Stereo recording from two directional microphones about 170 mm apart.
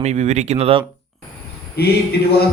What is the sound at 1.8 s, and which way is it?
Speech, 70° left (ahead or behind).